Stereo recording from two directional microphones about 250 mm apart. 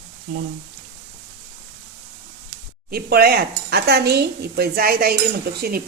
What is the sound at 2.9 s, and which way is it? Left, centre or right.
Stir, right.